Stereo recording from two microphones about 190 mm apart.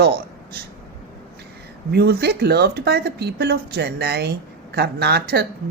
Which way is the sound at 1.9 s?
55° right (ahead or behind).